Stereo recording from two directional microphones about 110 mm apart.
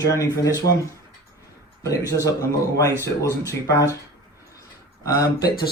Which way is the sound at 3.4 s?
30° left (ahead or behind).